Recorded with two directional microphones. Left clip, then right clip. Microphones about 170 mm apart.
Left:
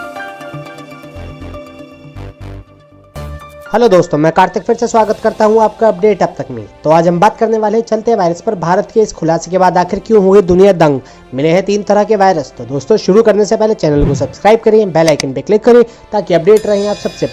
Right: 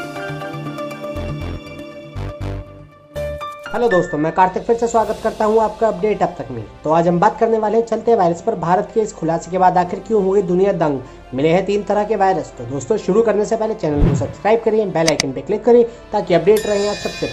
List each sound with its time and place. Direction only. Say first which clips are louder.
3.7 s speech: left 8 dB; 35° left (ahead or behind)
11.3 s speech: left 4 dB; 30° left (ahead or behind)
14.0 s a woman's voice: left 6 dB; 5° left (ahead or behind)
14.4 s speech: left 7 dB; 35° left (ahead or behind)